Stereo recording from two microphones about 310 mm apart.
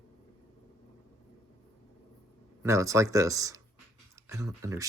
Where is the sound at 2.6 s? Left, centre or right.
Centre.